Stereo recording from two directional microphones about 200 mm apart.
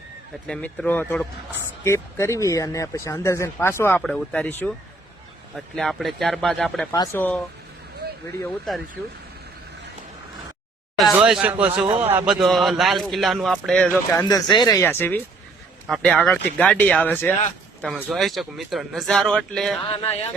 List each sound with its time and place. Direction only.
0.4 s a man's voice: 5° left (ahead or behind)
6.9 s speech: 15° left (ahead or behind)
10.9 s a man's voice: centre (ahead or behind)
14.3 s a man's voice: 20° left (ahead or behind); by 19.8 s centre (ahead or behind)
19.9 s speech: 30° left (ahead or behind)